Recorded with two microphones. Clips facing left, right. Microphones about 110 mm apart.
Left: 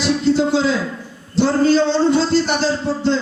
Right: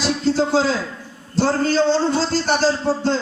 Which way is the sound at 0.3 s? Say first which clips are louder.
Left 1 dB; 40° right (ahead or behind).